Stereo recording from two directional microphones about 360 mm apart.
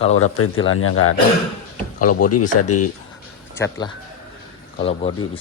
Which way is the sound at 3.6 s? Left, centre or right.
Centre.